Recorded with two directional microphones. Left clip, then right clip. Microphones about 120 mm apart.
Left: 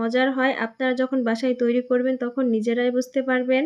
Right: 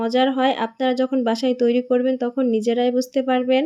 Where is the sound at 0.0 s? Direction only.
25° right (ahead or behind).